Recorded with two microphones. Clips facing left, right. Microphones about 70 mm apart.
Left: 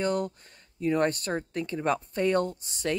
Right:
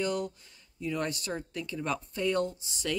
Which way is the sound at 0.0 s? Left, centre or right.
Left.